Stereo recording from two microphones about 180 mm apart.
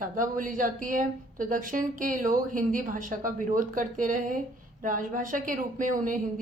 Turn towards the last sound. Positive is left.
turn(degrees=-45)  # may be behind; listen again after turning